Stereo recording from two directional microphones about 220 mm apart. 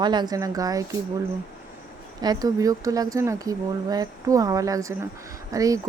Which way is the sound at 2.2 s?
15° right (ahead or behind).